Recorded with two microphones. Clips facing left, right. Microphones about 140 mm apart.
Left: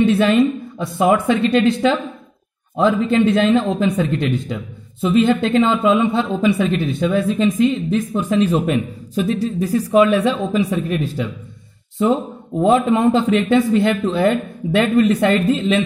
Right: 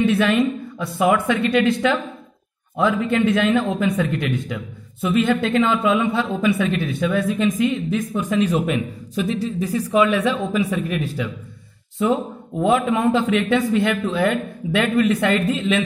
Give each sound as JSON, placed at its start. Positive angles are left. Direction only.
{"t": 0.0, "sound": "a woman's voice", "side_deg": 30}
{"t": 12.5, "sound": "a woman's voice", "side_deg": 35}